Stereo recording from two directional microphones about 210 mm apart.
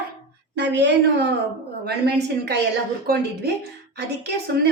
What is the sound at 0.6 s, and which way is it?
A woman's voice, 55° right (ahead or behind).